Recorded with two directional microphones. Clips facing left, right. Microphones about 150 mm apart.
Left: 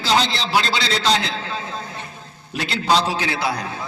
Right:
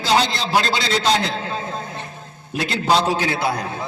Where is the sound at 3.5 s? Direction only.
25° right (ahead or behind).